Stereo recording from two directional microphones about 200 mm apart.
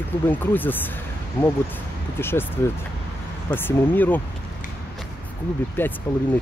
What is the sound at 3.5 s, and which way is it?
Speech, 10° left (ahead or behind).